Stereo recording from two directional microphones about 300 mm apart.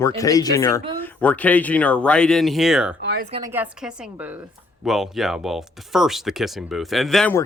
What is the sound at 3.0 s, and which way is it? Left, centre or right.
Speech, right.